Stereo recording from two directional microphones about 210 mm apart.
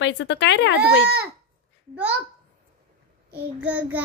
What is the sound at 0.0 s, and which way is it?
Speech, 55° left (ahead or behind).